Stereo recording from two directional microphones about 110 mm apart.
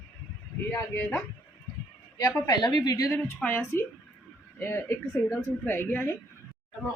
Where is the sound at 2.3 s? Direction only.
35° left (ahead or behind).